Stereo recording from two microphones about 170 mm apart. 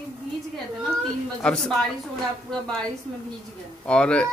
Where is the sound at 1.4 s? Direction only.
5° left (ahead or behind).